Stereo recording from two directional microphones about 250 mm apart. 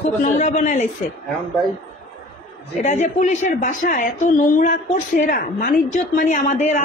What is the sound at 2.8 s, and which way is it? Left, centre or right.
A woman's voice, left.